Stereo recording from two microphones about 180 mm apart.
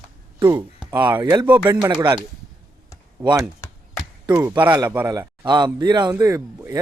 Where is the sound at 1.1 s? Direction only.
10° right (ahead or behind).